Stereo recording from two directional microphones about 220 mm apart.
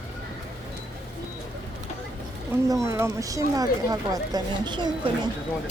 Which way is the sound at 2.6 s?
15° right (ahead or behind).